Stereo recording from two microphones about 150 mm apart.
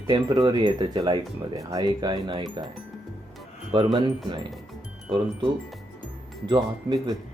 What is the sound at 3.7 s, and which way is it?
Speech, 30° right (ahead or behind).